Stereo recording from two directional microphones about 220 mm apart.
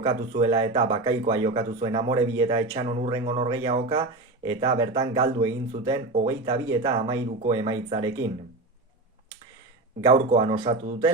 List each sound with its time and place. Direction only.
0.0 s speech: 20° right (ahead or behind)
10.0 s speech: 15° right (ahead or behind)